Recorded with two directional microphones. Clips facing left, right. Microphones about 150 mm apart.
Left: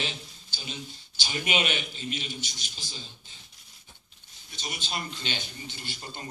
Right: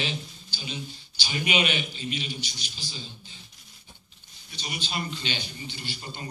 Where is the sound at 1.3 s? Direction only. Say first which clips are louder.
Right 2 dB; 40° left (ahead or behind).